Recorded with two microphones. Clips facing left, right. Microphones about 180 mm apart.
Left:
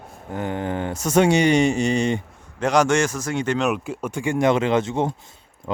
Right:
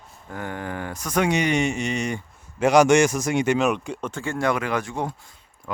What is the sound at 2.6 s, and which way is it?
A man's voice, 10° right (ahead or behind).